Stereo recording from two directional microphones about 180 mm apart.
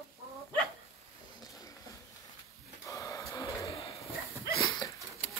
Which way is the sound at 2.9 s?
20° left (ahead or behind).